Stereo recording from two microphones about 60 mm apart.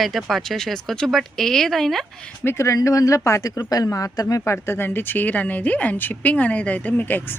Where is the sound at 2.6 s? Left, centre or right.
Left.